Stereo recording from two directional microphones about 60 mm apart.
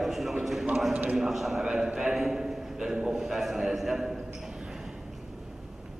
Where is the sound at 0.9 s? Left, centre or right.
Centre.